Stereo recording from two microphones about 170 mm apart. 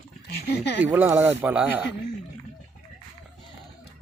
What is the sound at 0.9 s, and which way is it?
Speech, 10° right (ahead or behind).